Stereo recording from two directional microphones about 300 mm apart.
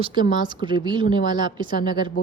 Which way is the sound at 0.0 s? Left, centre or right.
Centre.